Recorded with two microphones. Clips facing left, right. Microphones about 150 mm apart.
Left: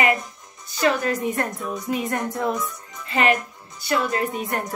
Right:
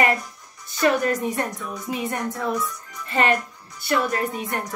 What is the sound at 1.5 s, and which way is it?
Music, 20° left (ahead or behind).